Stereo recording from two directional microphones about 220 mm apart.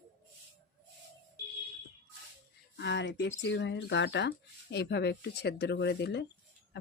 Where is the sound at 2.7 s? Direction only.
55° left (ahead or behind).